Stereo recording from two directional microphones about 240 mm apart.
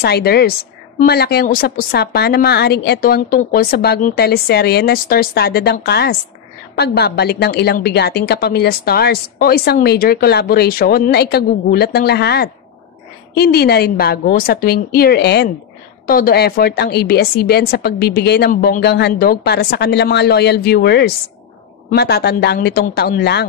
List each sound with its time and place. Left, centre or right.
0.0 s a woman's voice: left